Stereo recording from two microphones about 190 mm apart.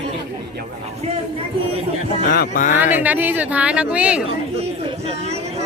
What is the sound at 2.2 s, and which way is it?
Music, 50° left (ahead or behind).